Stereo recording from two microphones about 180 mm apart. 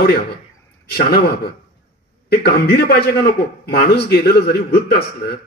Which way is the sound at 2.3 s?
60° left (ahead or behind).